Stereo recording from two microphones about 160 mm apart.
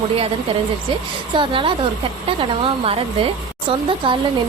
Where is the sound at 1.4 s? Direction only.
35° right (ahead or behind).